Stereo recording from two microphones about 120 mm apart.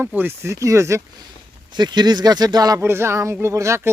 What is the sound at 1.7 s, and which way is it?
Speech, 35° right (ahead or behind).